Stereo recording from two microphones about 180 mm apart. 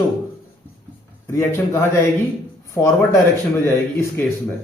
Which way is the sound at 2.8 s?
15° left (ahead or behind).